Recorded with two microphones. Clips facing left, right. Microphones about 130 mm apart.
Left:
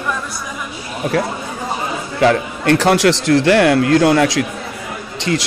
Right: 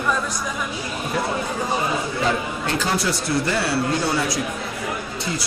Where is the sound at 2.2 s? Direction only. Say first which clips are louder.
Left 8 dB; 70° left (ahead or behind).